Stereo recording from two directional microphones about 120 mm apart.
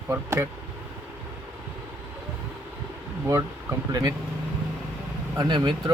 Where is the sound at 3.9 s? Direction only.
30° right (ahead or behind).